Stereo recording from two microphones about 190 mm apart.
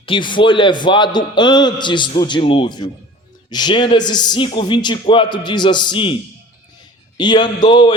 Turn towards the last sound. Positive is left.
turn(degrees=25)  # may be behind; listen again after turning